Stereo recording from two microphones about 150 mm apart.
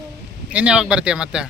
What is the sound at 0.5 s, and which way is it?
Speech, 5° right (ahead or behind).